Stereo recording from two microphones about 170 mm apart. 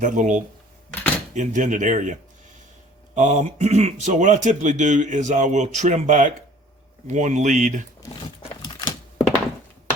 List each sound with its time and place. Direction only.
0.0 s speech: 50° right (ahead or behind)
3.2 s speech: 45° right (ahead or behind)
8.4 s a sound: 25° left (ahead or behind)